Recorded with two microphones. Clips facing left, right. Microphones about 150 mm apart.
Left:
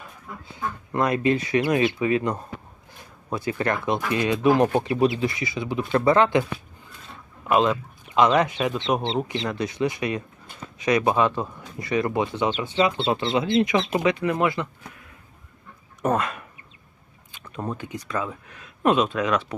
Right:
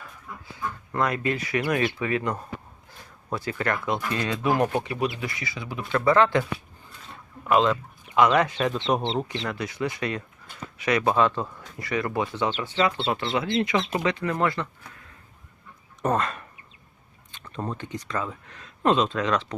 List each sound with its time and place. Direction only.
0.0 s speech: 20° left (ahead or behind)
7.4 s a man's voice: 20° left (ahead or behind)
8.9 s speech: 5° left (ahead or behind)
9.3 s speech: 25° left (ahead or behind)